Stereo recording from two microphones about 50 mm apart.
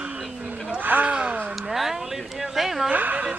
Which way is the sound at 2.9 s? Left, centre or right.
Right.